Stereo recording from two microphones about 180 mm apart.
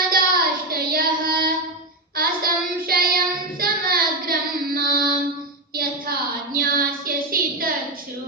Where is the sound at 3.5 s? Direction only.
55° right (ahead or behind).